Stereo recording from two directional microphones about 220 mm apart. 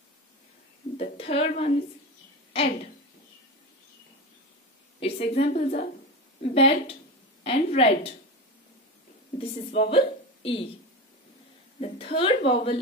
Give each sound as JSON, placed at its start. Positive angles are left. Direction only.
{"t": 0.9, "sound": "a woman's voice", "side_deg": 25}
{"t": 5.0, "sound": "a woman's voice", "side_deg": 30}
{"t": 9.4, "sound": "a woman's voice", "side_deg": 25}
{"t": 11.8, "sound": "speech", "side_deg": 25}